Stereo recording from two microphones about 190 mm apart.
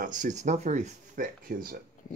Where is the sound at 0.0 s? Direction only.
45° right (ahead or behind).